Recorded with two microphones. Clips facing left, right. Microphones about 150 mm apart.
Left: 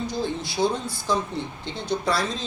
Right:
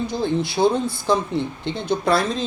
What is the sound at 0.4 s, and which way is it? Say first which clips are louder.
Speech: right 5 dB; 60° right (ahead or behind).